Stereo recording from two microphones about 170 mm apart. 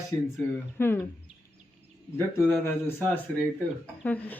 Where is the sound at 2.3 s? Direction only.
15° left (ahead or behind).